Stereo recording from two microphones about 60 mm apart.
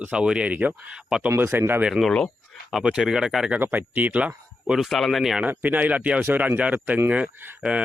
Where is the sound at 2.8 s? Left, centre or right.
Centre.